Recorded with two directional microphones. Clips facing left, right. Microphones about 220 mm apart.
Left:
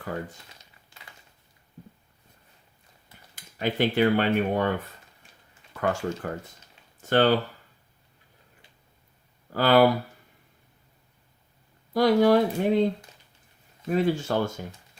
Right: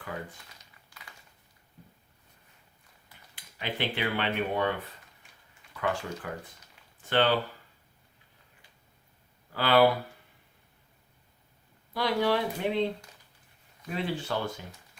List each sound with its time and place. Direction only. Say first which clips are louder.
3.3 s speech: left 8 dB; 45° left (ahead or behind)
5.7 s speech: left 5 dB; 45° left (ahead or behind)
9.5 s speech: left 4 dB; 45° left (ahead or behind)
11.9 s speech: left 8 dB; 45° left (ahead or behind)